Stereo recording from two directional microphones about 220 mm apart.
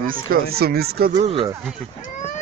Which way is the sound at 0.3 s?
45° right (ahead or behind).